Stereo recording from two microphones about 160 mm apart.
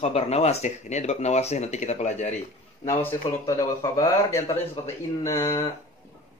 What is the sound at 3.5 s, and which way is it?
A man's voice, 20° left (ahead or behind).